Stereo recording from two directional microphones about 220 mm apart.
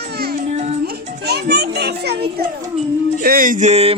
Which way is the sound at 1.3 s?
45° right (ahead or behind).